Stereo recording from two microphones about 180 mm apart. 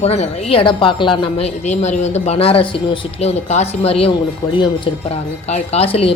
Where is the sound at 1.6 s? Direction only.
40° left (ahead or behind).